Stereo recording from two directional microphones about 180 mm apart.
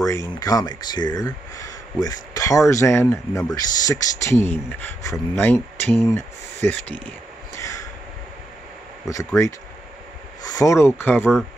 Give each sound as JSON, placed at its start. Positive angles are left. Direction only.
{"t": 0.4, "sound": "speech", "side_deg": 20}
{"t": 7.5, "sound": "a sound", "side_deg": 15}
{"t": 9.0, "sound": "speech", "side_deg": 15}